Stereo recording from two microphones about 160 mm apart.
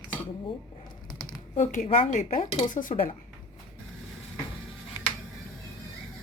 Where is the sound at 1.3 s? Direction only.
50° left (ahead or behind).